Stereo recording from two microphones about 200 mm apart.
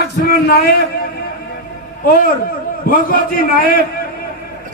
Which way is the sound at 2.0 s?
50° left (ahead or behind).